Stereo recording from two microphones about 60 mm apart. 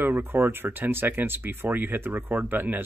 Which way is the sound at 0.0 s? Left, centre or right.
Right.